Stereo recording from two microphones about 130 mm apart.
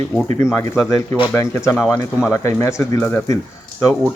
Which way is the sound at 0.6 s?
20° left (ahead or behind).